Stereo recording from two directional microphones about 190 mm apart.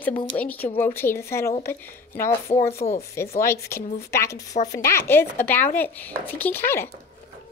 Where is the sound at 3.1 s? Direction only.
15° left (ahead or behind).